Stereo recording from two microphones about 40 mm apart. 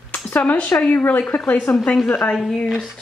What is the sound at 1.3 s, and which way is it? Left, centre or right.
Speech, left.